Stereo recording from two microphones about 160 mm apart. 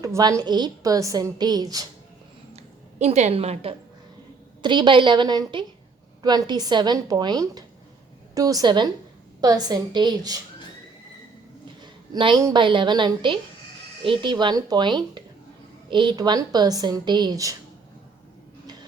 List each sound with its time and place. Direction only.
0.0 s a woman's voice: 20° right (ahead or behind)
3.0 s a woman's voice: 45° right (ahead or behind)
4.6 s a woman's voice: 30° right (ahead or behind)
11.8 s a sound: 30° right (ahead or behind)
12.5 s a woman's voice: 30° right (ahead or behind)